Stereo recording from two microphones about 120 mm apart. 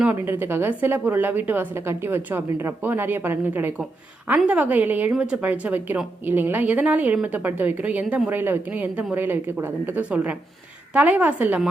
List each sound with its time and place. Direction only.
0.0 s a woman's voice: 15° right (ahead or behind)